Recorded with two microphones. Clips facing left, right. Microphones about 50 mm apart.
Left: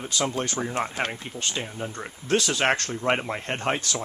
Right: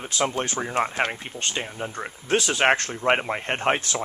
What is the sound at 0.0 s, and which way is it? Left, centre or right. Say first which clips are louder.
Speech: right 2 dB; centre.